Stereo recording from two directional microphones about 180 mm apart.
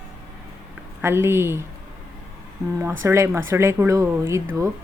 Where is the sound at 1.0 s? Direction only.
15° right (ahead or behind).